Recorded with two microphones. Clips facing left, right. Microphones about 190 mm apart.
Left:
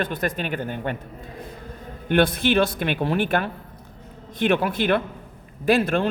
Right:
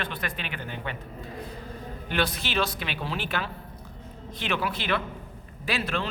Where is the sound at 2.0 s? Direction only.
55° left (ahead or behind).